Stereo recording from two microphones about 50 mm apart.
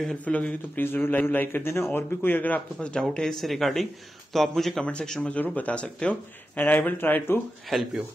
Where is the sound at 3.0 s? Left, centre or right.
Centre.